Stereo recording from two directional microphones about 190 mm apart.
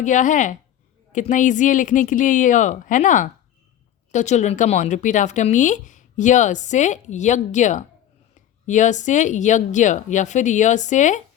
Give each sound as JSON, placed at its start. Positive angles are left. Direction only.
{"t": 0.0, "sound": "speech", "side_deg": 40}